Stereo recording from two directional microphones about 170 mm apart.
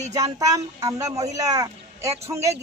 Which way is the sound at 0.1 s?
20° right (ahead or behind).